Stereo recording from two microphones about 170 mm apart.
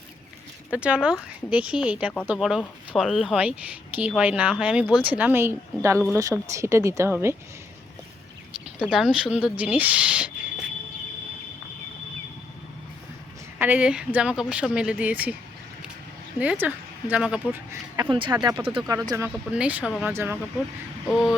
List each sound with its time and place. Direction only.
0.7 s speech: 5° right (ahead or behind)
8.8 s speech: 5° right (ahead or behind)
13.6 s speech: 10° right (ahead or behind)
16.4 s speech: 10° right (ahead or behind)
17.9 s speech: 25° right (ahead or behind)